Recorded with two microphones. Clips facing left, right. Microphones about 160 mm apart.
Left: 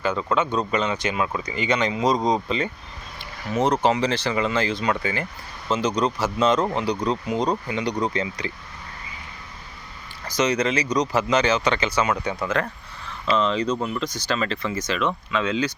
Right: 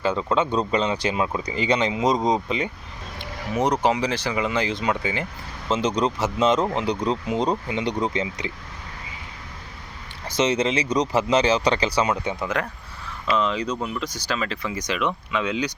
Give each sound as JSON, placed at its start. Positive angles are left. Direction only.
{"t": 0.0, "sound": "speech", "side_deg": -25}
{"t": 10.2, "sound": "speech", "side_deg": -25}
{"t": 12.1, "sound": "speech", "side_deg": -20}